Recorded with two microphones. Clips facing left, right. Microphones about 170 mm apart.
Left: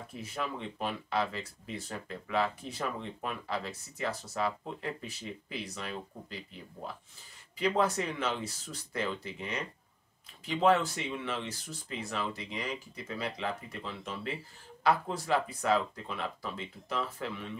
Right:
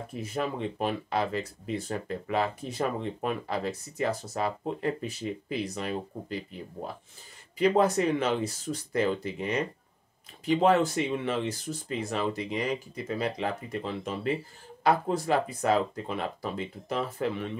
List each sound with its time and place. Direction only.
0.2 s speech: 45° right (ahead or behind)
7.5 s speech: 45° right (ahead or behind)